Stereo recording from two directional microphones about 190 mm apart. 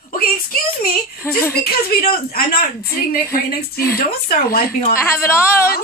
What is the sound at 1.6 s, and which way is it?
Speech, 55° left (ahead or behind).